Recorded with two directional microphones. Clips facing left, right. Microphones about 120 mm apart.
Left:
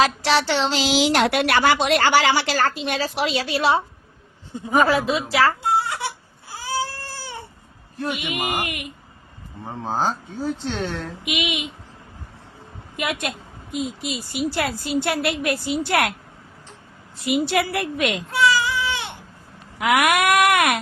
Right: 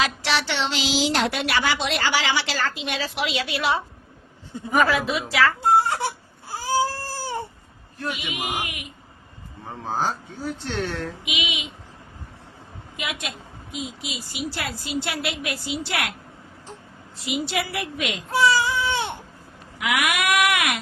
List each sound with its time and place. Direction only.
0.0 s a woman's voice: 40° left (ahead or behind)
0.9 s a woman's voice: 65° left (ahead or behind); by 5.5 s 35° left (ahead or behind)
5.7 s a sound: 40° right (ahead or behind)
6.5 s cat: 40° right (ahead or behind)
8.1 s speech: 55° left (ahead or behind)
9.8 s speech: 20° left (ahead or behind)
11.3 s speech: 55° left (ahead or behind)
13.0 s a woman's voice: 50° left (ahead or behind)
17.4 s a woman's voice: 50° left (ahead or behind)
18.3 s baby cry: 35° right (ahead or behind)
19.8 s a woman's voice: 45° left (ahead or behind)